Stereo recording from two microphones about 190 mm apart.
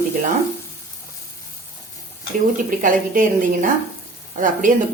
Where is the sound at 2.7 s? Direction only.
45° right (ahead or behind).